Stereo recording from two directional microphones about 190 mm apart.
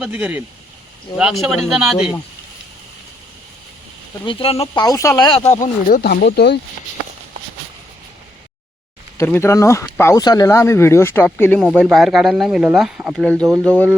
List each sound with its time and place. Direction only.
0.0 s speech: 5° right (ahead or behind)
4.3 s speech: 30° left (ahead or behind)
4.8 s speech: 20° left (ahead or behind)
5.5 s speech: 45° left (ahead or behind); by 6.6 s 60° left (ahead or behind)
9.1 s speech: 10° left (ahead or behind)
11.6 s speech: 5° right (ahead or behind)